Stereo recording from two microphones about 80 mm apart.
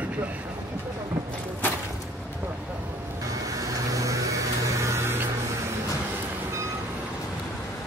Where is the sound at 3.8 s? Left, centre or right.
Right.